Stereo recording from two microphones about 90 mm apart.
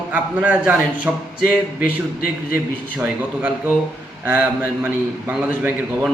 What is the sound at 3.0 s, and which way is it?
A man's voice, 20° right (ahead or behind).